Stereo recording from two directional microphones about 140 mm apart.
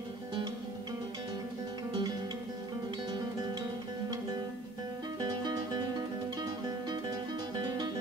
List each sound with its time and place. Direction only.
1.9 s music: 30° right (ahead or behind)
5.2 s music: 30° right (ahead or behind)